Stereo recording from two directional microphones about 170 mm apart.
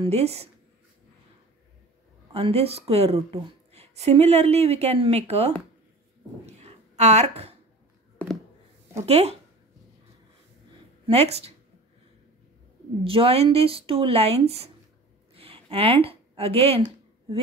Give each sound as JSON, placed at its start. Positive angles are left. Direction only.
{"t": 0.0, "sound": "speech", "side_deg": -35}
{"t": 2.3, "sound": "speech", "side_deg": -35}
{"t": 6.4, "sound": "a sound", "side_deg": -40}
{"t": 9.0, "sound": "speech", "side_deg": -40}
{"t": 11.1, "sound": "speech", "side_deg": -35}
{"t": 13.0, "sound": "speech", "side_deg": -35}
{"t": 15.3, "sound": "a sound", "side_deg": -35}